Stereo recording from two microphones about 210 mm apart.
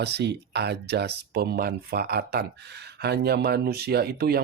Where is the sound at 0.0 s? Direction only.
50° right (ahead or behind).